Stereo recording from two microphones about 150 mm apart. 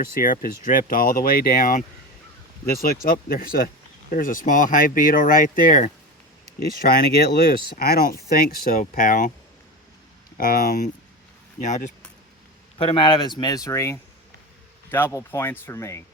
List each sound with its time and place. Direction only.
0.2 s speech: 65° left (ahead or behind)
4.1 s speech: 65° left (ahead or behind)
6.7 s speech: 85° left; by 9.3 s 65° left (ahead or behind)
10.3 s speech: 70° left (ahead or behind)
11.6 s speech: 55° left (ahead or behind)
12.8 s speech: 35° left (ahead or behind); by 16.0 s 20° left (ahead or behind)